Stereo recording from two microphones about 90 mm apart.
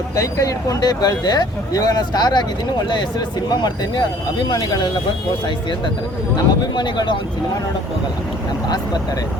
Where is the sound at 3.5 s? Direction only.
55° left (ahead or behind).